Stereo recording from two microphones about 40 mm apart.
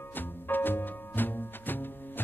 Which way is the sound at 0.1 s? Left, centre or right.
Left.